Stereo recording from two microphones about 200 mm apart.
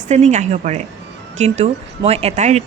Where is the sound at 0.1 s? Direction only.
35° right (ahead or behind).